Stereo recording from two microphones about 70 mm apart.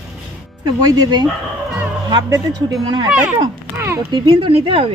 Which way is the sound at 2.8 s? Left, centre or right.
Right.